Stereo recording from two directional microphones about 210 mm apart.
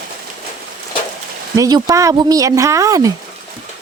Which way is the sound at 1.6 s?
20° right (ahead or behind).